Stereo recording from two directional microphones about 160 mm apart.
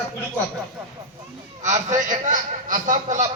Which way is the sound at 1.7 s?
50° right (ahead or behind).